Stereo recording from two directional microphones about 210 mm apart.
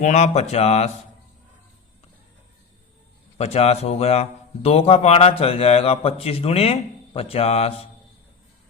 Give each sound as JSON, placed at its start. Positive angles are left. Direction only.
{"t": 0.0, "sound": "speech", "side_deg": 35}
{"t": 3.3, "sound": "a man's voice", "side_deg": 30}